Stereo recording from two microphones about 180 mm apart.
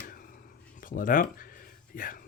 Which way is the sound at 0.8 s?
50° left (ahead or behind).